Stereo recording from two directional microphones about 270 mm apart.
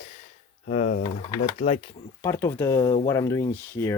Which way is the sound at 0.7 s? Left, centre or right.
Left.